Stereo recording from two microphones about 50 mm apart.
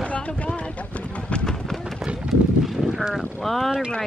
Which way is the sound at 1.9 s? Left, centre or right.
Centre.